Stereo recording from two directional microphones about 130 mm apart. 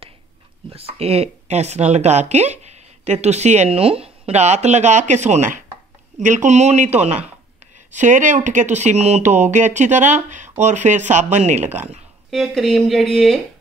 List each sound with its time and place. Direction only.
0.7 s speech: 50° right (ahead or behind)
7.9 s speech: 70° right (ahead or behind)
11.6 s speech: 10° right (ahead or behind)
12.3 s speech: centre (ahead or behind)